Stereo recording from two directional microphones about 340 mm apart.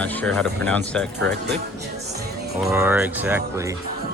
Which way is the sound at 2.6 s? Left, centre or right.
Centre.